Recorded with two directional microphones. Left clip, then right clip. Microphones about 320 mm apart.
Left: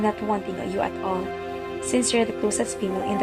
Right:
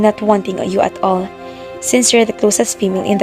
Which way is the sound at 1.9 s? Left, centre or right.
Right.